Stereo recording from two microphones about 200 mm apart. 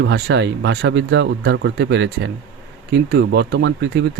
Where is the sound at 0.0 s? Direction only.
60° right (ahead or behind).